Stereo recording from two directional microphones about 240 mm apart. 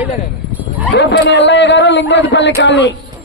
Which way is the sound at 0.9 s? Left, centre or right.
Left.